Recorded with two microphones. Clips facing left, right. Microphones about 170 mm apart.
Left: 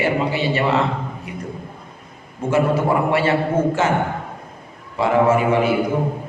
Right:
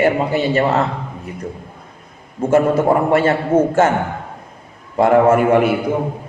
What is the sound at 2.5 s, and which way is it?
A man's voice, 45° right (ahead or behind).